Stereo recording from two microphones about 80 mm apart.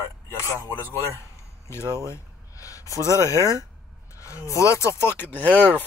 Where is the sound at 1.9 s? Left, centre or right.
Left.